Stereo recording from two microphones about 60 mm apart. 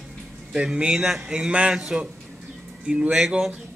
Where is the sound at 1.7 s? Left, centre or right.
Centre.